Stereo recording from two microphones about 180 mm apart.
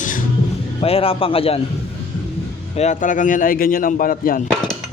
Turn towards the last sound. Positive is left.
turn(degrees=50)  # may be behind; listen again after turning